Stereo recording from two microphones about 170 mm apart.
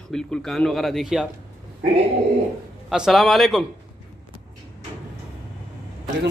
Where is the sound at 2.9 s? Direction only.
5° right (ahead or behind).